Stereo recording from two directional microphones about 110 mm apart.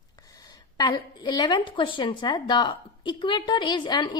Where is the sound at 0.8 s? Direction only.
40° left (ahead or behind).